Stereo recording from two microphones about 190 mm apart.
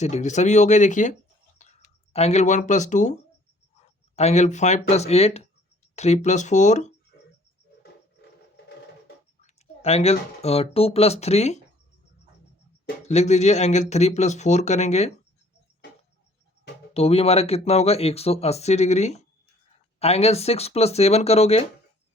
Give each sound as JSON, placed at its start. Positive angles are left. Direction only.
{"t": 0.0, "sound": "speech", "side_deg": 35}
{"t": 9.4, "sound": "speech", "side_deg": 35}
{"t": 13.1, "sound": "speech", "side_deg": 35}
{"t": 16.9, "sound": "speech", "side_deg": 30}